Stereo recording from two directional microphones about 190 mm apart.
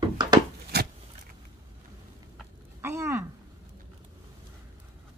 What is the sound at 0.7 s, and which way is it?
Vehicle, 60° right (ahead or behind).